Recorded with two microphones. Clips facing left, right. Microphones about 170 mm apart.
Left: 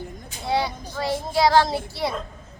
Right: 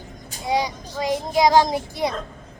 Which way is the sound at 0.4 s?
15° right (ahead or behind).